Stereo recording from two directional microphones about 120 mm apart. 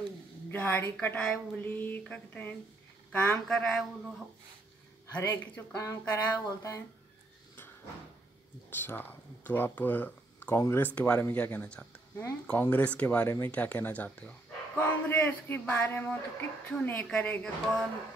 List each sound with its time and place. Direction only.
0.5 s speech: 15° left (ahead or behind)
5.2 s speech: 20° left (ahead or behind)
8.6 s speech: 15° left (ahead or behind)